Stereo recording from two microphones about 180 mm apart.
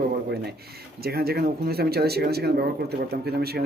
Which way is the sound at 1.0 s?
60° right (ahead or behind).